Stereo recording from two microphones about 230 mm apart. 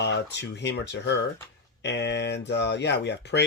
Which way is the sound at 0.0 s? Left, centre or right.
Left.